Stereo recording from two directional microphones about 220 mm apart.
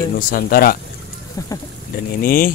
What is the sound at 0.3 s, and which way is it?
Speech, 40° left (ahead or behind).